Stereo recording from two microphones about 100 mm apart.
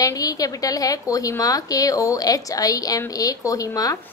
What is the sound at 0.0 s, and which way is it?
A woman's voice, 35° left (ahead or behind).